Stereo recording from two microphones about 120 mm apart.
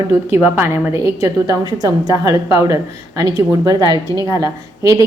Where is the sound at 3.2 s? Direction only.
30° right (ahead or behind).